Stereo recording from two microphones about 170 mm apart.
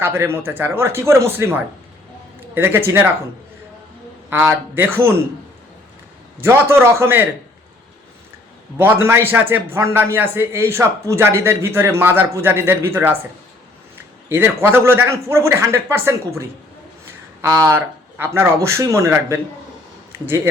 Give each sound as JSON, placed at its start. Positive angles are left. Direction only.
{"t": 0.0, "sound": "a man's voice", "side_deg": -15}
{"t": 4.3, "sound": "a man's voice", "side_deg": -10}
{"t": 6.4, "sound": "a man's voice", "side_deg": -15}
{"t": 8.8, "sound": "a man's voice", "side_deg": -15}
{"t": 14.3, "sound": "a man's voice", "side_deg": -10}
{"t": 17.7, "sound": "a man's voice", "side_deg": -15}